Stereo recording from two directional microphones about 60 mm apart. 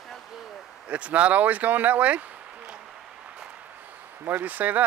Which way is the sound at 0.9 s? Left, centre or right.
Right.